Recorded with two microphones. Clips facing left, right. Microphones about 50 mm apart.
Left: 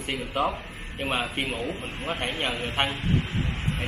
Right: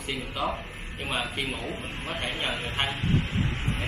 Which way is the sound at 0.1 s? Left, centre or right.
Left.